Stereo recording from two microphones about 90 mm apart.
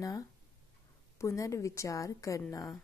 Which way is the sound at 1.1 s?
35° left (ahead or behind).